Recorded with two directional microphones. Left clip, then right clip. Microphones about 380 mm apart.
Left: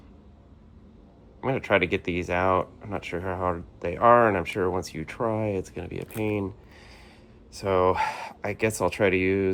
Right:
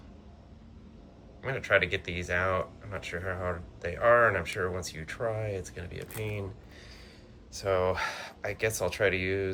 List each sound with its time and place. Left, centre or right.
1.4 s speech: centre
7.5 s speech: centre